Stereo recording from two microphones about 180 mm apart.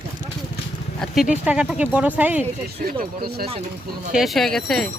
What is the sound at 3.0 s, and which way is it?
Speech, 60° right (ahead or behind).